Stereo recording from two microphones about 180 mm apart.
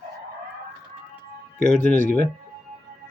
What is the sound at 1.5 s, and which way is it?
Speech, 45° left (ahead or behind).